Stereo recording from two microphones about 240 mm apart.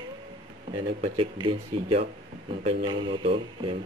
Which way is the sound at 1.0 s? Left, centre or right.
Right.